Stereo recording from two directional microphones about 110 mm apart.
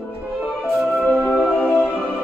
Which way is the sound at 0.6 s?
5° left (ahead or behind).